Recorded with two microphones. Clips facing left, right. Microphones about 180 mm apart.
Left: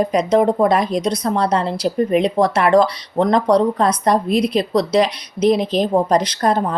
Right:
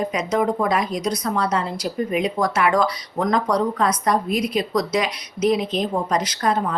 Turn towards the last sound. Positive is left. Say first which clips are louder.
# left 4 dB
turn(degrees=35)  # may be behind; listen again after turning